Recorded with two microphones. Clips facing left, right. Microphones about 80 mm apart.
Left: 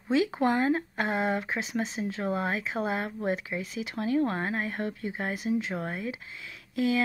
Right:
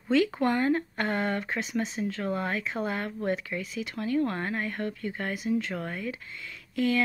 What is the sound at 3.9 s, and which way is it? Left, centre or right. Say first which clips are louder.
Speech: left 1 dB; left.